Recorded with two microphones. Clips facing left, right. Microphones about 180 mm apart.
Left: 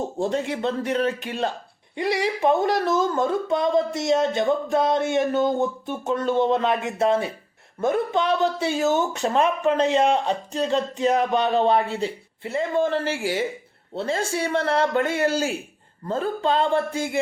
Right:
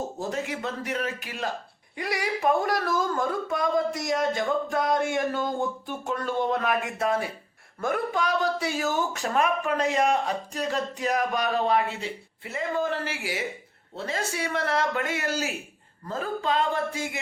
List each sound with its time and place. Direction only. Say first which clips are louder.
0.2 s speech: left 9 dB; 30° left (ahead or behind)